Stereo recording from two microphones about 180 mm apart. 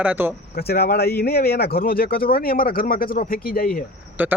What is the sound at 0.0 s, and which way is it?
Speech, 10° right (ahead or behind).